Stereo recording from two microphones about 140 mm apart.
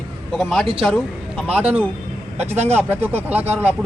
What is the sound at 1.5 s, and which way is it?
A man's voice, 10° right (ahead or behind).